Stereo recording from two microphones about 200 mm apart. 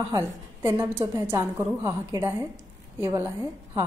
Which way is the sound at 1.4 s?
5° right (ahead or behind).